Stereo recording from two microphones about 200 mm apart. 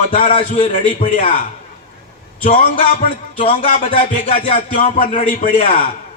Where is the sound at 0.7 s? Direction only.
40° left (ahead or behind).